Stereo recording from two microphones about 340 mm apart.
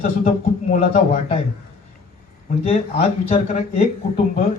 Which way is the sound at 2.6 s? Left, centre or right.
Centre.